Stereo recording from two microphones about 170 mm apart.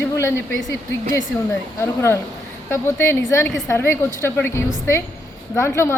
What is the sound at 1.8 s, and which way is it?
A woman's voice, 15° left (ahead or behind).